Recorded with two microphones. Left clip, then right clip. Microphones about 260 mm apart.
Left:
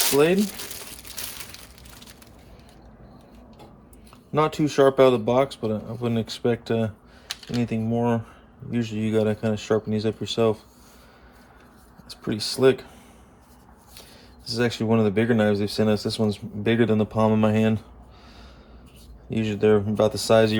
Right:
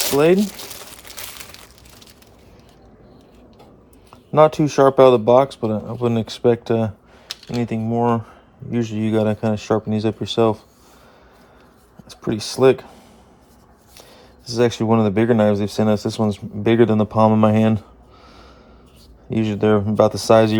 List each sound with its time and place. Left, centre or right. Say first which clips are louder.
4.3 s speech: right 9 dB; right
7.3 s computer keyboard: right 3 dB; centre
7.6 s speech: right 5 dB; right
12.2 s speech: right 5 dB; right
14.4 s speech: right 6 dB; right
19.3 s speech: right 3 dB; right